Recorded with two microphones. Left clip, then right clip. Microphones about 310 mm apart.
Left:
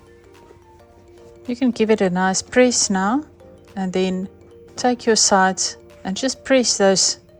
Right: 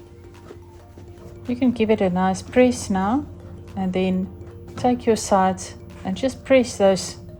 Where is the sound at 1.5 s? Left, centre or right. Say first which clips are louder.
Left 2 dB; left.